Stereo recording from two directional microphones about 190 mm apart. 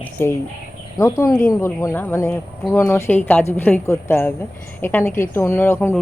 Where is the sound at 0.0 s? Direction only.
10° left (ahead or behind).